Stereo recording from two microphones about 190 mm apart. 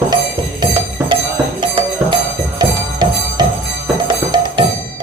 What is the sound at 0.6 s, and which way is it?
Music, 20° right (ahead or behind).